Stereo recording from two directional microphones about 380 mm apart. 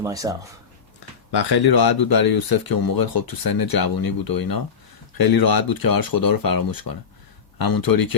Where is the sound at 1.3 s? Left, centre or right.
Left.